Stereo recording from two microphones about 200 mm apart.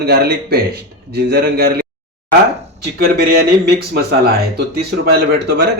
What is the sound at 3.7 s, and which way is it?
A man's voice, 50° right (ahead or behind).